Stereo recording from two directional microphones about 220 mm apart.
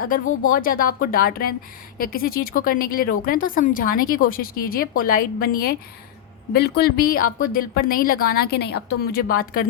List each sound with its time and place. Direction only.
0.5 s a woman's voice: 40° left (ahead or behind)